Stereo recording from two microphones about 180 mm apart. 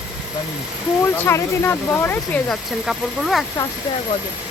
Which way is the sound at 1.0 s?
10° left (ahead or behind).